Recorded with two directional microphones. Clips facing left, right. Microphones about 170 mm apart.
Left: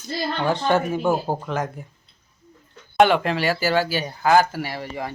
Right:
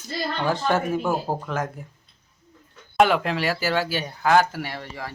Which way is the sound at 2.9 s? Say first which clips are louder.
Left 2 dB; centre (ahead or behind).